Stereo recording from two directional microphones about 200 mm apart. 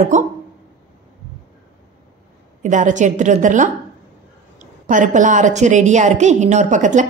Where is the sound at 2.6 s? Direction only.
40° right (ahead or behind).